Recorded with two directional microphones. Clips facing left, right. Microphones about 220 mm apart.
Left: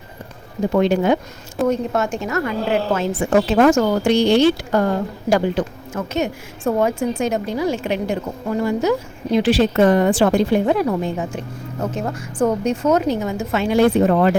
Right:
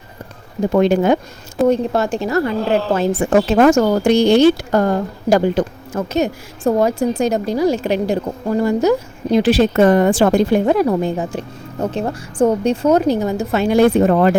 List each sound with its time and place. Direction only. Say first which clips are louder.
0.7 s speech: right 3 dB; 45° right (ahead or behind)
1.6 s a woman's voice: right 4 dB; 30° right (ahead or behind)